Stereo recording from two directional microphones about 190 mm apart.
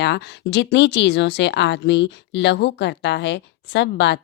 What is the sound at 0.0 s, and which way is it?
Speech, 65° left (ahead or behind).